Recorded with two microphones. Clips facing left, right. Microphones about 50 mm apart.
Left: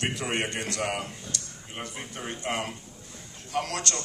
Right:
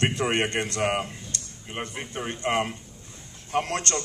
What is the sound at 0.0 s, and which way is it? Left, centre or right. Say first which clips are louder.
A man's voice: right 5 dB; right.